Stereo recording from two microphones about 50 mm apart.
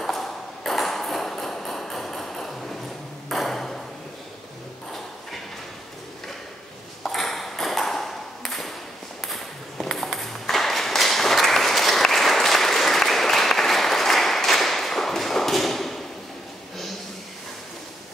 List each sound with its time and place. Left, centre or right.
0.0 s ping: centre
7.0 s ping: centre